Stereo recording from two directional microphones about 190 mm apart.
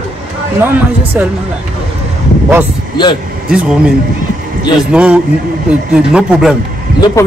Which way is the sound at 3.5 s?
5° right (ahead or behind).